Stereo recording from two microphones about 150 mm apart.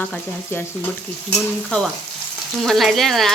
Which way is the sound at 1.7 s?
5° left (ahead or behind).